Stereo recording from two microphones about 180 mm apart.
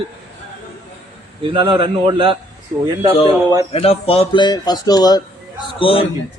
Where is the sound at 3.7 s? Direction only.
35° left (ahead or behind).